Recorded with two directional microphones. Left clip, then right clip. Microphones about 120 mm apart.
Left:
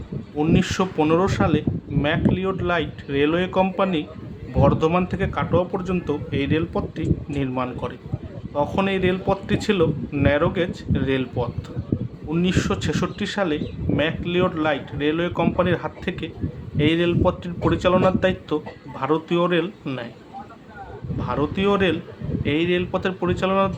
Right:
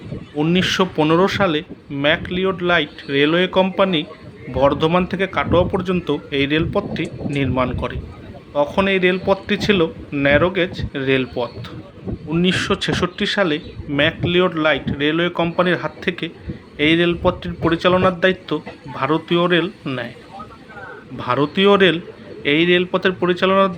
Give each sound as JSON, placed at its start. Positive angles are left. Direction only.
{"t": 0.3, "sound": "a man's voice", "side_deg": -20}
{"t": 21.2, "sound": "a man's voice", "side_deg": -35}